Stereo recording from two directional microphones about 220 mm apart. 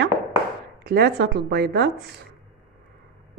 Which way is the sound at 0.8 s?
45° right (ahead or behind).